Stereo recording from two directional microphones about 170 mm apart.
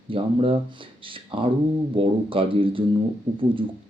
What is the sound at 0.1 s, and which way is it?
Speech, 30° right (ahead or behind).